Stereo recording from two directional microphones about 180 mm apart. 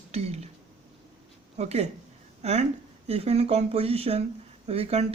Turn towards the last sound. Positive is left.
turn(degrees=-35)  # may be behind; listen again after turning